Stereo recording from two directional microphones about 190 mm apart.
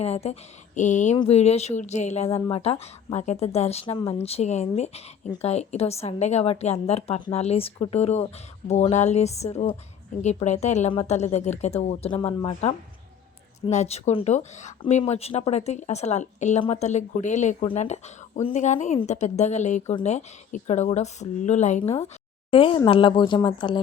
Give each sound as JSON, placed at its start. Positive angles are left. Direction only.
{"t": 0.0, "sound": "speech", "side_deg": 35}
{"t": 1.1, "sound": "speech", "side_deg": 25}
{"t": 1.4, "sound": "speech", "side_deg": 35}
{"t": 22.5, "sound": "speech", "side_deg": 25}